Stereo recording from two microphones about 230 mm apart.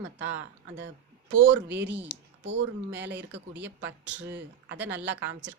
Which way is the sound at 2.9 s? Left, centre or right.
Right.